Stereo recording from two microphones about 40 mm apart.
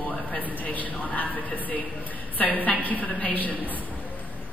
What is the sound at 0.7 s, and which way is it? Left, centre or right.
A man's voice, left.